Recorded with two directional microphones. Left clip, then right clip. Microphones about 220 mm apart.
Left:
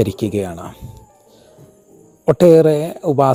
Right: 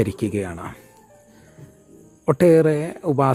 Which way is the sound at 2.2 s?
5° left (ahead or behind).